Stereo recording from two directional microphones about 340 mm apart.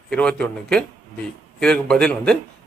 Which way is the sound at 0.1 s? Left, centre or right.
Centre.